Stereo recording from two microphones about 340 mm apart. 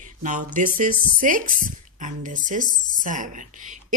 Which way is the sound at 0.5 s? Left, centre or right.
Right.